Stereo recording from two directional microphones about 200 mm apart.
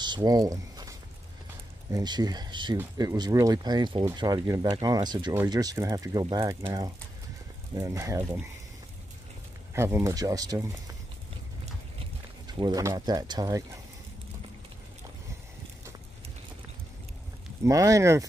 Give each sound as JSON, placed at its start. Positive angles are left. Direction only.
{"t": 0.0, "sound": "a sound", "side_deg": -20}
{"t": 1.9, "sound": "speech", "side_deg": -20}
{"t": 9.8, "sound": "speech", "side_deg": -15}
{"t": 12.5, "sound": "speech", "side_deg": -20}
{"t": 17.6, "sound": "speech", "side_deg": -15}